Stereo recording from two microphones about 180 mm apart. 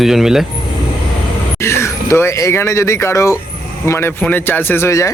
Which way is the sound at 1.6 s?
15° left (ahead or behind).